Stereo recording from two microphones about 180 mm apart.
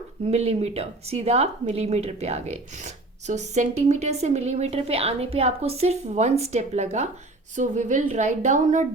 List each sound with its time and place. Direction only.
0.3 s a woman's voice: 35° right (ahead or behind)